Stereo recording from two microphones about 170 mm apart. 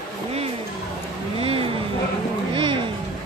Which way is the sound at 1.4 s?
35° right (ahead or behind).